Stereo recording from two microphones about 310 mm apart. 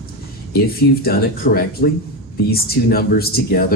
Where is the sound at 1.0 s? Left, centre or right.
Left.